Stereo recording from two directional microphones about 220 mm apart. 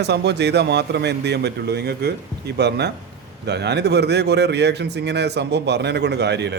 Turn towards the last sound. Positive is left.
turn(degrees=-50)  # may be behind; listen again after turning